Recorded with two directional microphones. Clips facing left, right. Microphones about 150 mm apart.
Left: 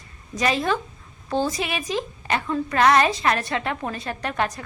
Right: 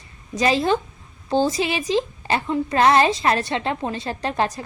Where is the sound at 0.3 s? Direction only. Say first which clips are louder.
Right 3 dB; 30° right (ahead or behind).